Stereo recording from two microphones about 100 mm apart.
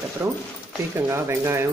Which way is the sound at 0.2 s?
25° right (ahead or behind).